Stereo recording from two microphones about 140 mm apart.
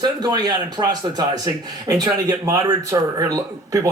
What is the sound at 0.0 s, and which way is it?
Speech, 30° right (ahead or behind).